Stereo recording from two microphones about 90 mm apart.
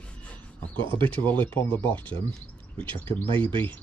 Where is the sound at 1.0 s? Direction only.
20° left (ahead or behind).